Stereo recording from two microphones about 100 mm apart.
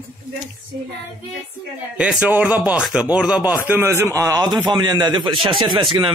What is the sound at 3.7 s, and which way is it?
Speech, 25° right (ahead or behind).